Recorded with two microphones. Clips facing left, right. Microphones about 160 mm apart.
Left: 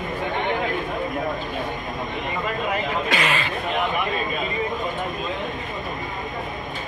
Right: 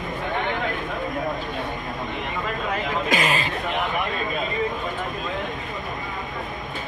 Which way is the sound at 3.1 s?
40° right (ahead or behind).